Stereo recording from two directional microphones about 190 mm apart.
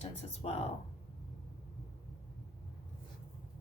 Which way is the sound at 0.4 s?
30° left (ahead or behind).